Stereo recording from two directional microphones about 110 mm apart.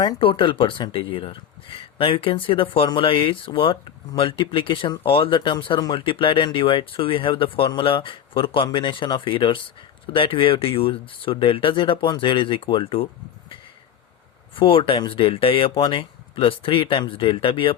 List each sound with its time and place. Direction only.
0.2 s speech: 50° left (ahead or behind)
14.5 s speech: 55° left (ahead or behind)